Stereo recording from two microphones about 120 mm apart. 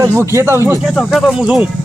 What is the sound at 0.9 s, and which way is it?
Speech, centre (ahead or behind).